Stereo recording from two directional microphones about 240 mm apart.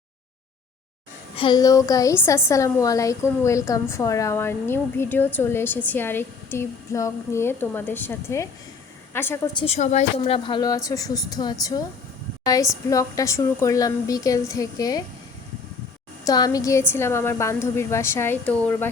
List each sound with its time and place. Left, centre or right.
1.4 s a woman's voice: centre
9.6 s a woman's voice: left
12.9 s a woman's voice: centre
16.2 s a woman's voice: centre